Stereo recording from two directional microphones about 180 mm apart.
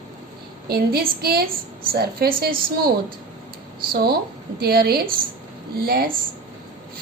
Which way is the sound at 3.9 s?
60° right (ahead or behind).